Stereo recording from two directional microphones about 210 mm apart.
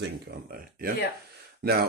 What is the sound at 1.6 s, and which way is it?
Speech, 45° right (ahead or behind).